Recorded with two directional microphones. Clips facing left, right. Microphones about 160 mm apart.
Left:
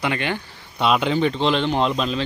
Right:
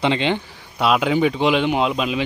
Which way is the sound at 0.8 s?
5° right (ahead or behind).